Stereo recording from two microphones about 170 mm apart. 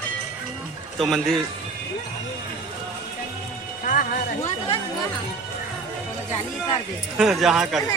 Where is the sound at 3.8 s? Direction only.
50° left (ahead or behind).